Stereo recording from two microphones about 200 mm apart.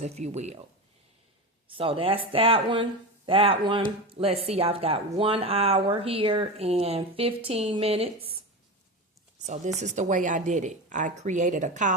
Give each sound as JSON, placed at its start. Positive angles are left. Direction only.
{"t": 0.0, "sound": "a woman's voice", "side_deg": -35}
{"t": 1.6, "sound": "speech", "side_deg": -25}
{"t": 9.5, "sound": "a woman's voice", "side_deg": -35}